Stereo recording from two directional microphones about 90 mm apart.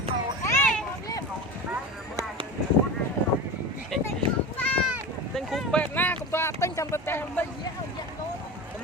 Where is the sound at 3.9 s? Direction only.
5° left (ahead or behind).